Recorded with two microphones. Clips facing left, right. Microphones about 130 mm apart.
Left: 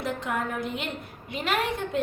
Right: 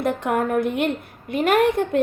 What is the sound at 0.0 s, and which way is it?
A woman's voice, 55° right (ahead or behind).